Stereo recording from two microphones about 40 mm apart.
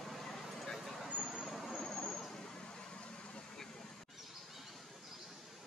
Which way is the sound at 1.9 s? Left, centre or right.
Centre.